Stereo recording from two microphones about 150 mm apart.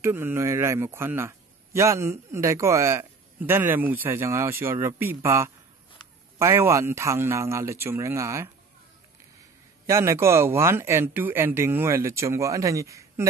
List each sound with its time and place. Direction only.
0.0 s a man's voice: 15° right (ahead or behind)
9.8 s a man's voice: 20° right (ahead or behind)